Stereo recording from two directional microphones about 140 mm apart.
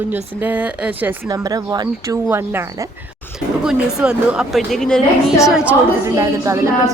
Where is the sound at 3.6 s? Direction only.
5° right (ahead or behind).